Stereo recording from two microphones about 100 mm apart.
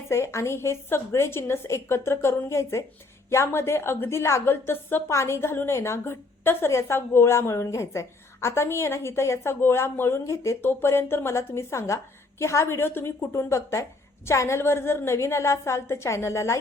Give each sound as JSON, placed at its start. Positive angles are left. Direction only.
{"t": 0.1, "sound": "a woman's voice", "side_deg": 25}